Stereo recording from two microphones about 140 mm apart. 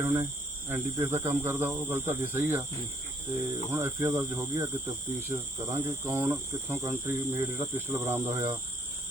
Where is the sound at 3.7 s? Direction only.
20° right (ahead or behind).